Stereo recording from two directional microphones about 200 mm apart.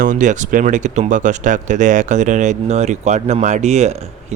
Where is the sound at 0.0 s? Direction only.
40° right (ahead or behind).